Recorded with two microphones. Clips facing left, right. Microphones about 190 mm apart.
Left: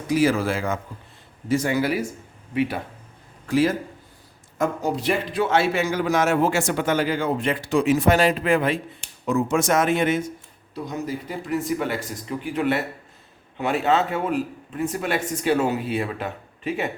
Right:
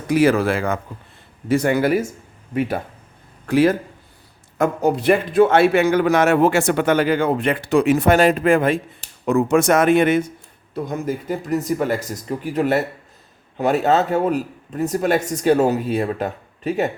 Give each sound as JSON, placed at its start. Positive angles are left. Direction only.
{"t": 0.1, "sound": "a man's voice", "side_deg": -60}
{"t": 3.4, "sound": "a man's voice", "side_deg": -60}